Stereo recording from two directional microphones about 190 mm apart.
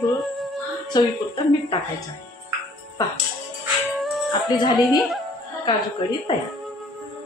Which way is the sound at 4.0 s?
Centre (ahead or behind).